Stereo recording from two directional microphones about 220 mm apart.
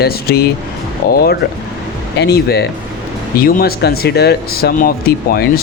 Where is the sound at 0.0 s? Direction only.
45° left (ahead or behind).